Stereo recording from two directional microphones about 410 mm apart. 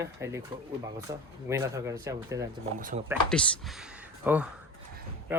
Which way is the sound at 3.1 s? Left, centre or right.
Centre.